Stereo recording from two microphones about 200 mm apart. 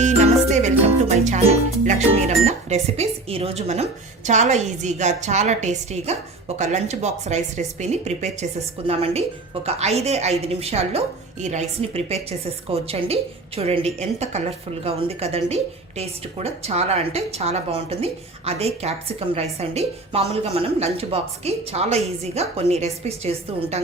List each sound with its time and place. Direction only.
0.0 s music: 35° right (ahead or behind)
4.3 s a woman's voice: 35° right (ahead or behind)